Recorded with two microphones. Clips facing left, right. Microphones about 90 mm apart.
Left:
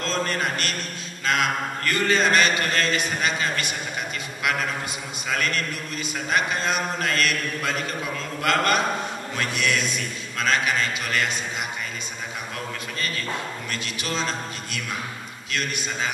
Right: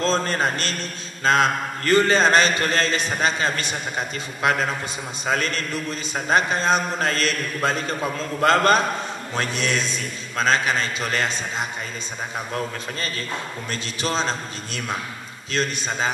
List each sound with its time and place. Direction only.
0.0 s a man's voice: 30° right (ahead or behind)
13.7 s speech: 30° right (ahead or behind)